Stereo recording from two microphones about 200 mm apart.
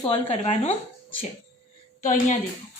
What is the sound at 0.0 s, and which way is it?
Speech, 30° left (ahead or behind).